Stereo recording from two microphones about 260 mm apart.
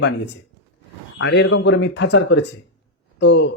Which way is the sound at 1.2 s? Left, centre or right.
Left.